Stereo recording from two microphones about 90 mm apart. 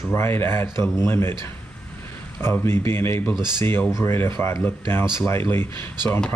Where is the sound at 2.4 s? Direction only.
25° left (ahead or behind).